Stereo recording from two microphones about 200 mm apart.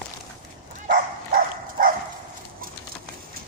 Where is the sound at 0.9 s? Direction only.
45° right (ahead or behind).